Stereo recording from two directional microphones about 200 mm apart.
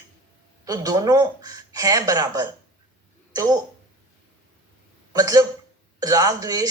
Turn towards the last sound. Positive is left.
turn(degrees=-15)  # may be behind; listen again after turning